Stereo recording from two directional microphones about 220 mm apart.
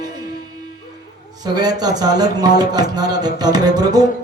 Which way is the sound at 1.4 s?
20° right (ahead or behind).